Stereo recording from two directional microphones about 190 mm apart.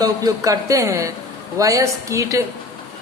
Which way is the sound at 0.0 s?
20° right (ahead or behind).